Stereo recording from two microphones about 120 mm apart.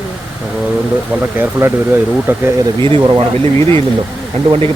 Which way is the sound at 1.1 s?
15° right (ahead or behind).